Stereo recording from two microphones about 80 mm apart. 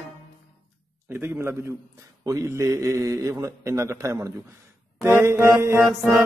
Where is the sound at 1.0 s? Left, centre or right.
Right.